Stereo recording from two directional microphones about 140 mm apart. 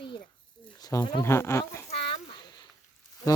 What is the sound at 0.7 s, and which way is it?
Speech, 30° left (ahead or behind).